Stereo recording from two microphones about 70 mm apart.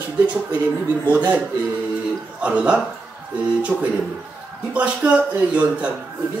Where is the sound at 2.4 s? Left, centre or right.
Centre.